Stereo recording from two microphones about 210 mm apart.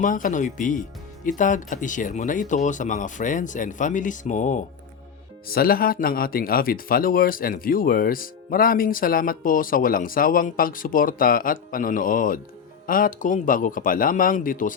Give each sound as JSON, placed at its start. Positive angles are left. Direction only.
{"t": 0.0, "sound": "speech", "side_deg": 40}